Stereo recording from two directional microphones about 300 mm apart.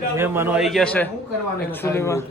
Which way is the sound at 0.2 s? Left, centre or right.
Centre.